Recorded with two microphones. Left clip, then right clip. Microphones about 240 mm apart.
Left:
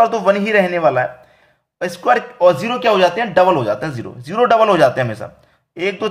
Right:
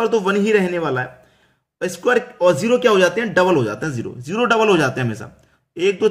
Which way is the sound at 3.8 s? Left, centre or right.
Centre.